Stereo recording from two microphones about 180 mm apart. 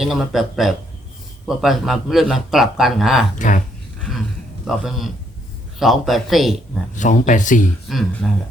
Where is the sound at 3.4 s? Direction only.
45° left (ahead or behind).